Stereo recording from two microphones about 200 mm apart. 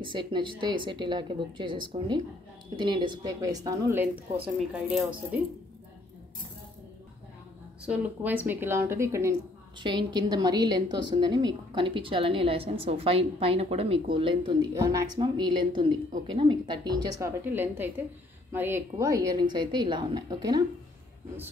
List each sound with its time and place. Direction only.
0.0 s a woman's voice: 25° right (ahead or behind); by 5.4 s 5° right (ahead or behind)
7.8 s a woman's voice: 10° right (ahead or behind)
17.5 s a woman's voice: 10° right (ahead or behind)